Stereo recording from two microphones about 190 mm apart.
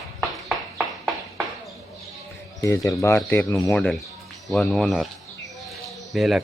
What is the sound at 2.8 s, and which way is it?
Speech, 15° left (ahead or behind).